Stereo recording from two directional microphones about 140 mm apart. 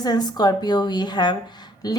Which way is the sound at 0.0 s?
30° left (ahead or behind).